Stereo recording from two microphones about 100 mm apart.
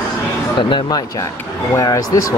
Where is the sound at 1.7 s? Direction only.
35° left (ahead or behind).